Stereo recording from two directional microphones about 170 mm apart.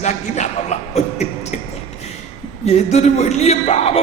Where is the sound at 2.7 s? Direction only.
40° left (ahead or behind).